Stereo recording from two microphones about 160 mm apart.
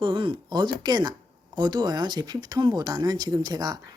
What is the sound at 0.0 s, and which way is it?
Speech, 30° right (ahead or behind).